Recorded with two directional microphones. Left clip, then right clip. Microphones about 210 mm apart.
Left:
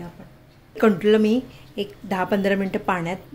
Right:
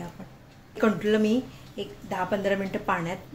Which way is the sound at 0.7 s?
30° left (ahead or behind).